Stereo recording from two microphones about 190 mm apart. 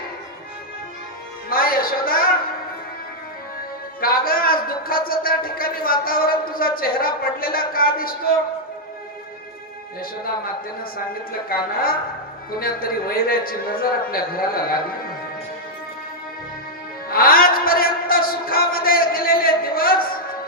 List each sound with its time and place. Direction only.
1.5 s a man's voice: 50° left (ahead or behind)
4.0 s a man's voice: 50° left (ahead or behind)
10.9 s a man's voice: 50° left (ahead or behind)
17.1 s a sound: 50° left (ahead or behind)